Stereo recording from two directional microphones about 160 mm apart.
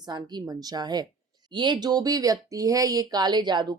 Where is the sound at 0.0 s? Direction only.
25° right (ahead or behind).